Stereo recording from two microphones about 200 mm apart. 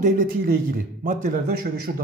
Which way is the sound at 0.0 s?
45° right (ahead or behind).